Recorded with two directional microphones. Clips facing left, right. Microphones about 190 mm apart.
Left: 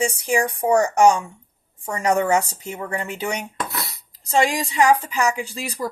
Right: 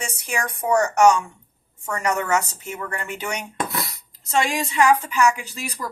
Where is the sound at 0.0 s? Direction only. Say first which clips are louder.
Left 7 dB; 30° left (ahead or behind).